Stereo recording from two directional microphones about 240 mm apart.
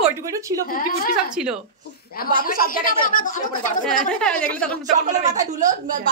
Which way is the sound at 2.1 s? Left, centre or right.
Left.